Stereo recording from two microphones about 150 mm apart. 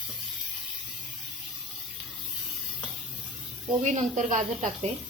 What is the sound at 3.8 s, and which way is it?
Speech, 55° right (ahead or behind).